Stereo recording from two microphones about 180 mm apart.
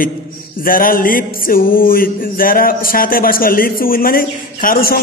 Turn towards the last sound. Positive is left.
turn(degrees=55)  # may be behind; listen again after turning